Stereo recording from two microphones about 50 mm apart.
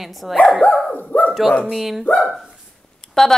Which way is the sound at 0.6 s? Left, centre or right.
Left.